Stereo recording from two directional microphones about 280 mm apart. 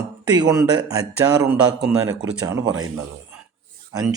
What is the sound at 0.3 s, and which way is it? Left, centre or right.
Speech, centre.